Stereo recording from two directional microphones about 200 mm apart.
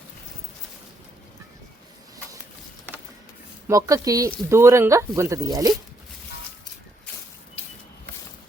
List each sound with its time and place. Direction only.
3.7 s speech: 15° right (ahead or behind)